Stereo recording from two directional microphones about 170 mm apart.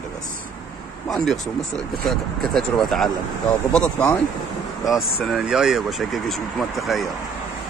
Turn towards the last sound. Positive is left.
turn(degrees=0)  # may be behind; listen again after turning